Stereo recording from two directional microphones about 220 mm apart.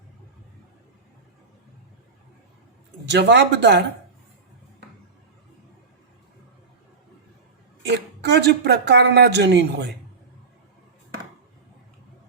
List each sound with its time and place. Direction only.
3.1 s speech: 50° right (ahead or behind)
7.8 s speech: 50° right (ahead or behind)